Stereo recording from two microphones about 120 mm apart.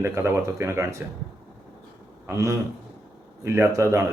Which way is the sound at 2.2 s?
25° right (ahead or behind).